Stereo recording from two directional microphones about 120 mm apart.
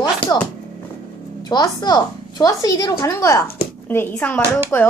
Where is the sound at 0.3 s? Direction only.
30° left (ahead or behind).